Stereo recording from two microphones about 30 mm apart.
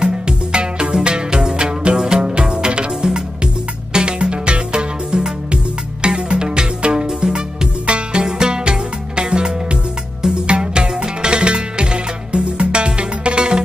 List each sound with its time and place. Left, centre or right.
0.0 s music: right